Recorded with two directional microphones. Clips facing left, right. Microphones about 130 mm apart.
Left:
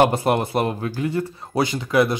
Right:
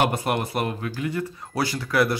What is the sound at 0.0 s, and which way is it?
Speech, 30° left (ahead or behind).